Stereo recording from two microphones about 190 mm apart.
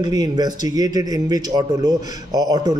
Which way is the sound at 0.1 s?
20° right (ahead or behind).